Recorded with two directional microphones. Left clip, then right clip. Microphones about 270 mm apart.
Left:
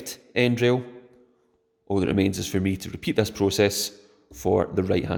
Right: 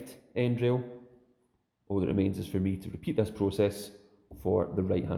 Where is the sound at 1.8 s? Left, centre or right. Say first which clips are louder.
Left 7 dB; left.